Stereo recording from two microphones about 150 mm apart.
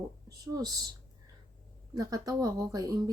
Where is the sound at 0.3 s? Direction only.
25° right (ahead or behind).